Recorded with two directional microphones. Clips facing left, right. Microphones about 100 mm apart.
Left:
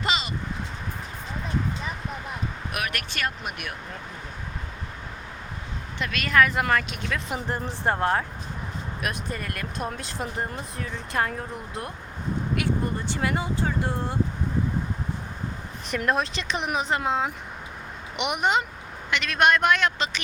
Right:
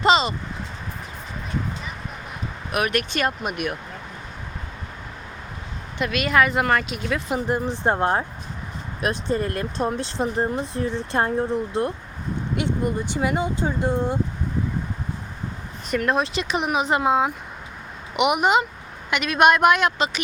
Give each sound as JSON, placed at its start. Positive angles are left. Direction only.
{"t": 0.0, "sound": "speech", "side_deg": -30}
{"t": 2.7, "sound": "speech", "side_deg": -25}
{"t": 6.0, "sound": "speech", "side_deg": -10}
{"t": 7.4, "sound": "speech", "side_deg": -15}
{"t": 16.0, "sound": "speech", "side_deg": 0}